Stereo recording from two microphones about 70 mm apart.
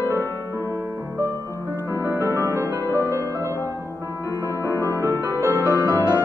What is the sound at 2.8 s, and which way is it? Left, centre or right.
Music, left.